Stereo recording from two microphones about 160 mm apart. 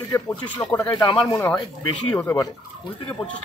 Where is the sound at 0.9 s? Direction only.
30° left (ahead or behind).